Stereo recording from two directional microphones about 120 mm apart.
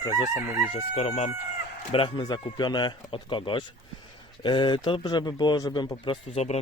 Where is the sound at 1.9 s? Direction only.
45° left (ahead or behind).